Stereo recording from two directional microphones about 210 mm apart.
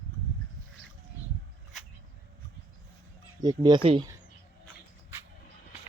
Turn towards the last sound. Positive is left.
turn(degrees=-25)  # may be behind; listen again after turning